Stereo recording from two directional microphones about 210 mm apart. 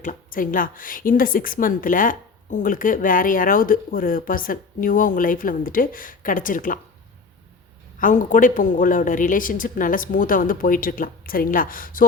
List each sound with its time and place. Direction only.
0.0 s a woman's voice: 40° left (ahead or behind)
7.9 s a woman's voice: 40° left (ahead or behind)